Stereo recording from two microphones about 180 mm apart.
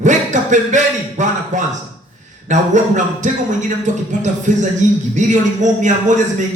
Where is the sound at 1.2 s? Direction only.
45° right (ahead or behind).